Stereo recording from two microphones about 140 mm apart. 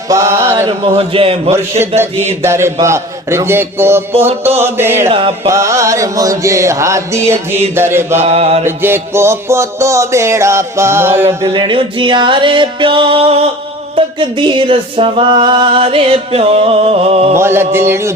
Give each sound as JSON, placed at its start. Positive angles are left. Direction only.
{"t": 0.1, "sound": "a sound", "side_deg": -20}
{"t": 0.7, "sound": "music", "side_deg": -40}
{"t": 2.4, "sound": "music", "side_deg": -20}
{"t": 2.8, "sound": "a man's voice", "side_deg": -20}
{"t": 5.0, "sound": "mantra", "side_deg": -45}
{"t": 5.5, "sound": "music", "side_deg": -20}
{"t": 7.8, "sound": "a man's voice", "side_deg": -15}
{"t": 8.2, "sound": "mantra", "side_deg": -50}
{"t": 8.6, "sound": "music", "side_deg": -15}
{"t": 11.5, "sound": "music", "side_deg": -35}
{"t": 17.3, "sound": "a man's voice", "side_deg": -15}